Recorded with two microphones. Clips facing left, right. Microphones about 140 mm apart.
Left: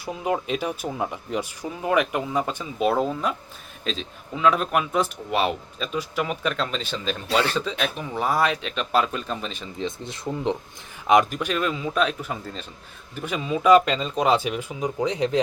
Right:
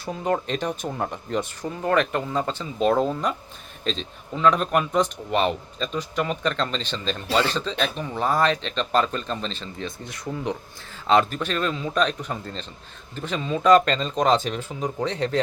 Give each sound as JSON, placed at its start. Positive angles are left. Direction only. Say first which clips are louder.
{"t": 0.0, "sound": "speech", "louder": "right 1 dB", "side_deg": 10}